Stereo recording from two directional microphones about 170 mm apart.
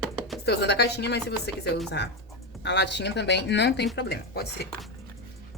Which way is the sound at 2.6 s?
90° left.